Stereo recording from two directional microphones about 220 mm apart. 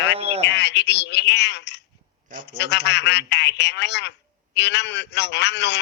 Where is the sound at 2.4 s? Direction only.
50° left (ahead or behind).